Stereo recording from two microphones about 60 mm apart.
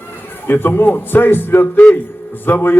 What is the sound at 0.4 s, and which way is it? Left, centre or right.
A man's voice, left.